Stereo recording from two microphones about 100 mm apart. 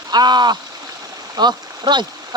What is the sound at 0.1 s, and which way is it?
Speech, 45° right (ahead or behind).